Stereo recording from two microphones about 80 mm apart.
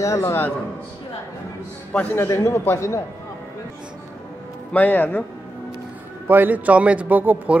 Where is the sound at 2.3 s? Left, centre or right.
Left.